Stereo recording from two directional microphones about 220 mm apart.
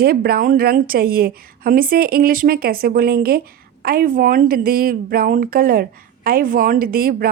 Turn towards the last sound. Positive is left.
turn(degrees=-40)  # may be behind; listen again after turning